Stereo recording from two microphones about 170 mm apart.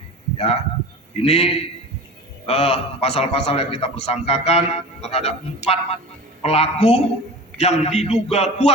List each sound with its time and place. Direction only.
0.3 s a man's voice: 35° left (ahead or behind)